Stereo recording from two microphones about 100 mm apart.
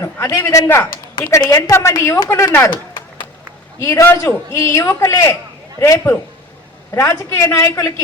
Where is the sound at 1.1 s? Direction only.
40° left (ahead or behind).